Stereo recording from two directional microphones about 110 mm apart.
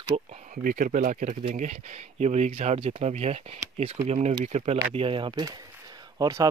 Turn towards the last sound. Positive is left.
turn(degrees=-35)  # may be behind; listen again after turning